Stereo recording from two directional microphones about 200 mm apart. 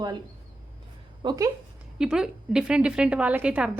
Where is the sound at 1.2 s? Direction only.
20° right (ahead or behind).